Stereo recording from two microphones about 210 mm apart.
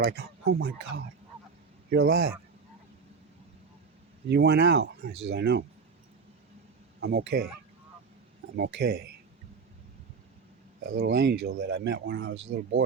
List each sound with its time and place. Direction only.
0.0 s speech: 50° right (ahead or behind)
4.3 s speech: 50° right (ahead or behind)
7.0 s speech: 50° right (ahead or behind)
8.5 s speech: 50° right (ahead or behind)
10.9 s speech: 55° right (ahead or behind)